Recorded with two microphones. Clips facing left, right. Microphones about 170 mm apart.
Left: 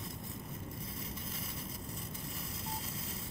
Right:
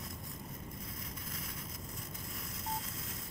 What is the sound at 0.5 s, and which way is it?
Vehicle, 30° left (ahead or behind).